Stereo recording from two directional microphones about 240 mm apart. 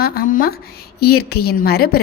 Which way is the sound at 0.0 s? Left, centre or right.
Left.